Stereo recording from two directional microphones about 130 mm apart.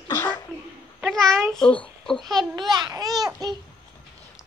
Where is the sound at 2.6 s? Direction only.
30° right (ahead or behind).